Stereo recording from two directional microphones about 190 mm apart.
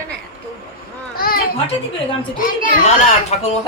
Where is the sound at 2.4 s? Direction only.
45° left (ahead or behind).